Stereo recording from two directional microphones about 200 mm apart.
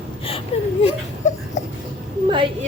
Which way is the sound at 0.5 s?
30° left (ahead or behind).